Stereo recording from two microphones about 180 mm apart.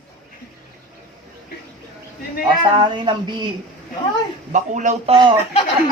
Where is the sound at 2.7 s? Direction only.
25° right (ahead or behind).